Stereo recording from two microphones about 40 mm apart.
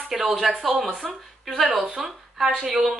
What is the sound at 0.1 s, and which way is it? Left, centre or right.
Speech, centre.